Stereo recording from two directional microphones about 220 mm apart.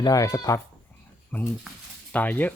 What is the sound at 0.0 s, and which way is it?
Speech, 15° left (ahead or behind).